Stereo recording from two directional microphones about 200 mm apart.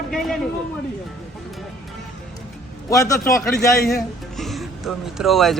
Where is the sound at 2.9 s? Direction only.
15° left (ahead or behind).